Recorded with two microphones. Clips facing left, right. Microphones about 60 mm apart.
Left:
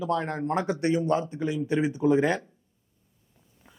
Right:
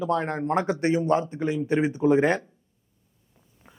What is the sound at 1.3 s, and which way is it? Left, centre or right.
A man's voice, right.